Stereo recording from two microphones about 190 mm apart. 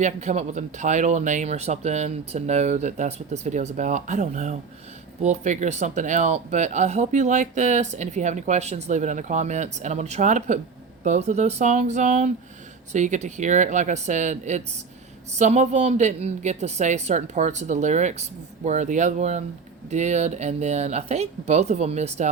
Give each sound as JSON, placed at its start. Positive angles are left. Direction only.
{"t": 0.0, "sound": "speech", "side_deg": -35}